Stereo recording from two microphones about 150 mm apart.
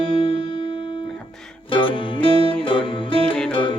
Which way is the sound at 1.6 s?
35° left (ahead or behind).